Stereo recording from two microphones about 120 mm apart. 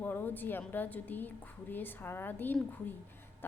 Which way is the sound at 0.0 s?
15° left (ahead or behind).